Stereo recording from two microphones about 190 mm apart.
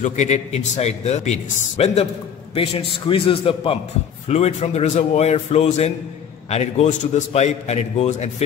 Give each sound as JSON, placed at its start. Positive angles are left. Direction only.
{"t": 0.0, "sound": "a man's voice", "side_deg": 40}